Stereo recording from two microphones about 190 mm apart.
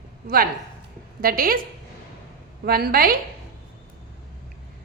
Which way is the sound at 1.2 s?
50° right (ahead or behind).